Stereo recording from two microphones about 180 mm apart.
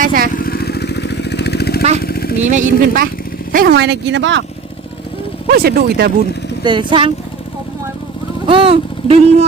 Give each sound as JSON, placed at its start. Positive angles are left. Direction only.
{"t": 0.0, "sound": "motorcycle", "side_deg": -55}
{"t": 0.3, "sound": "motorcycle", "side_deg": 55}
{"t": 2.0, "sound": "vehicle", "side_deg": 55}
{"t": 2.4, "sound": "speech", "side_deg": -45}
{"t": 5.5, "sound": "speech", "side_deg": -60}
{"t": 6.7, "sound": "speech", "side_deg": -25}
{"t": 8.4, "sound": "speech", "side_deg": -30}